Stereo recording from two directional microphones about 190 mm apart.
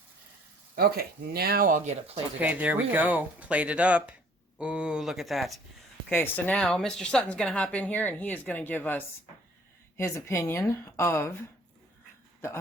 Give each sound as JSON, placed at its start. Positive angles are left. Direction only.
{"t": 0.8, "sound": "speech", "side_deg": -55}
{"t": 2.4, "sound": "speech", "side_deg": -10}